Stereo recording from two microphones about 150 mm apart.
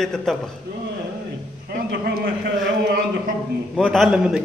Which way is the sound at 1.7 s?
90° right.